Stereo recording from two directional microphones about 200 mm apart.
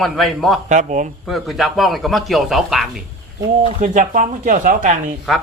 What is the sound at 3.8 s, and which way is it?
Speech, 40° right (ahead or behind).